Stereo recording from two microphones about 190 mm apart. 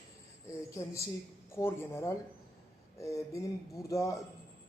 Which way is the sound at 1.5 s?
15° left (ahead or behind).